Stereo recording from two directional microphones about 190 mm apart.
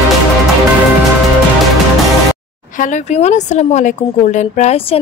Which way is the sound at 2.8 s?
40° left (ahead or behind).